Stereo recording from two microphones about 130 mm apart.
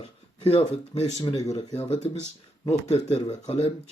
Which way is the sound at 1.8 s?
50° left (ahead or behind).